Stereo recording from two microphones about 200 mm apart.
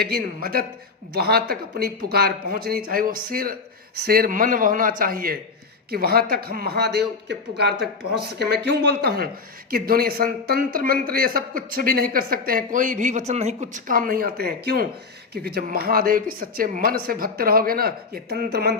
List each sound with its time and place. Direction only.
0.0 s a man's voice: 50° right (ahead or behind)